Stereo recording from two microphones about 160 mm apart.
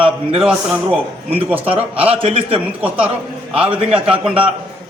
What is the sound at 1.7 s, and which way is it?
Speech, 35° right (ahead or behind).